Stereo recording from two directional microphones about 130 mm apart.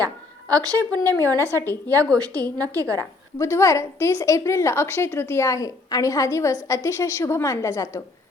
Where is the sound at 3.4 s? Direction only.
25° left (ahead or behind).